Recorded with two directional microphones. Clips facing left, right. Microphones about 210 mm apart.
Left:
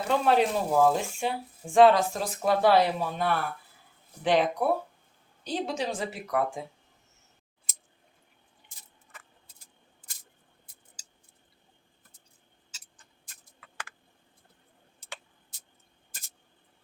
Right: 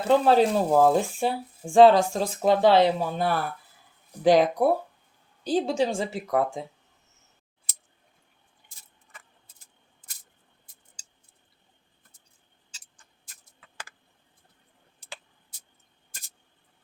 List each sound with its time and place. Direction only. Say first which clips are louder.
0.1 s speech: right 5 dB; 30° right (ahead or behind)